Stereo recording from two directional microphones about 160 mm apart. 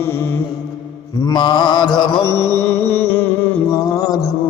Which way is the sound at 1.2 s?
25° left (ahead or behind).